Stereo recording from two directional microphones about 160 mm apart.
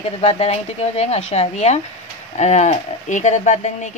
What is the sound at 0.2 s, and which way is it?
A woman's voice, 40° left (ahead or behind).